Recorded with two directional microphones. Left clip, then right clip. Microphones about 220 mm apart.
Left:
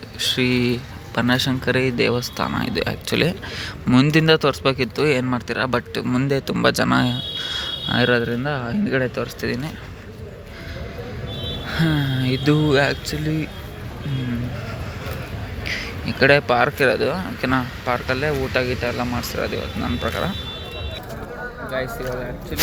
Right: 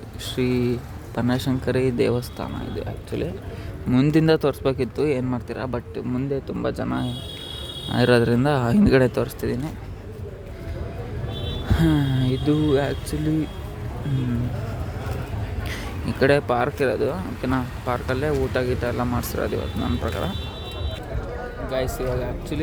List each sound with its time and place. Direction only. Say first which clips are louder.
0.2 s a man's voice: left 5 dB; 5° right (ahead or behind)
2.6 s speech: left 8 dB; 15° left (ahead or behind)
3.8 s speech: left 3 dB; 5° right (ahead or behind); by 7.1 s 10° left (ahead or behind)
7.9 s a man's voice: left 2 dB; 10° right (ahead or behind)
8.1 s speech: right 2 dB; 20° right (ahead or behind)
11.7 s a man's voice: right 1 dB; 10° right (ahead or behind)
15.6 s a man's voice: left 6 dB; 20° right (ahead or behind)
19.8 s speech: left 3 dB; centre (ahead or behind)
22.5 s a man's voice: left 8 dB; 15° right (ahead or behind)